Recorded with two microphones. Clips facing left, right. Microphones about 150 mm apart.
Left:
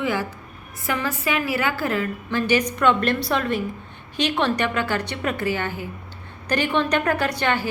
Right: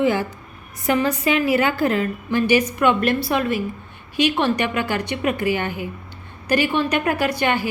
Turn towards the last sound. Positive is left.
turn(degrees=-15)  # may be behind; listen again after turning